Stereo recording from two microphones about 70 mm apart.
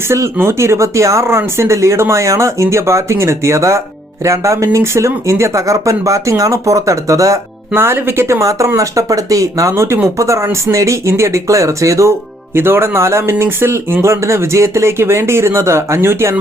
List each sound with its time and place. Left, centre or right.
0.1 s speech: right
7.7 s speech: right
9.7 s speech: right
12.5 s speech: right